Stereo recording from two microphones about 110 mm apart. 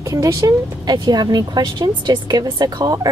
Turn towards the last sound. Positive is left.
turn(degrees=-35)  # may be behind; listen again after turning